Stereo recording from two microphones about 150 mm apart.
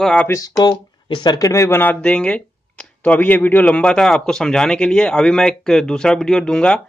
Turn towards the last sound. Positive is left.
turn(degrees=5)  # may be behind; listen again after turning